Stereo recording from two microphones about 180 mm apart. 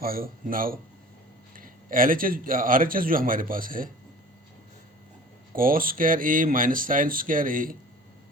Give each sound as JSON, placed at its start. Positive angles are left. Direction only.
{"t": 0.0, "sound": "a man's voice", "side_deg": -55}
{"t": 5.5, "sound": "a man's voice", "side_deg": -50}